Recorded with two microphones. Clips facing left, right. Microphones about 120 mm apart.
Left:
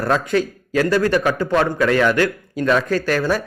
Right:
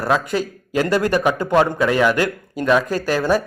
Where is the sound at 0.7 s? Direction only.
20° right (ahead or behind).